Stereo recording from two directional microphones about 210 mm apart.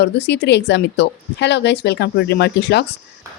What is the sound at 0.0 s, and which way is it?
A woman's voice, 55° left (ahead or behind).